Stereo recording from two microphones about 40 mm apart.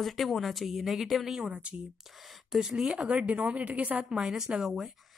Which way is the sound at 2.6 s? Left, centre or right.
Centre.